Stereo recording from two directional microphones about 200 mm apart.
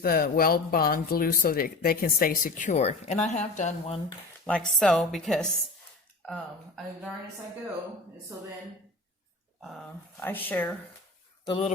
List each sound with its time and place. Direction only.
0.0 s speech: 50° left (ahead or behind); by 4.0 s 35° left (ahead or behind)
4.4 s a woman's voice: 5° left (ahead or behind)
10.2 s speech: 10° left (ahead or behind)
11.4 s speech: 25° left (ahead or behind)